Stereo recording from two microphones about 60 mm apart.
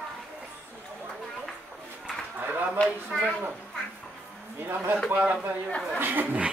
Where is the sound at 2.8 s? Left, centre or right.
Left.